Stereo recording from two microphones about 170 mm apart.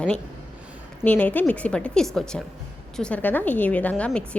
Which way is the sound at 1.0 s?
10° left (ahead or behind).